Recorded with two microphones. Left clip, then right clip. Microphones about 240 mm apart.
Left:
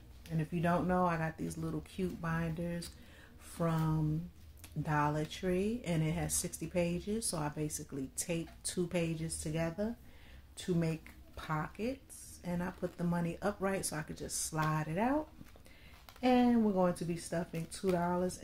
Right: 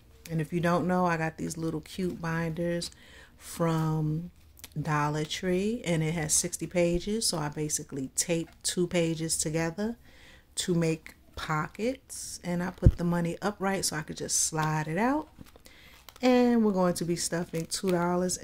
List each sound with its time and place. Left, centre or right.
0.2 s speech: right
16.2 s speech: right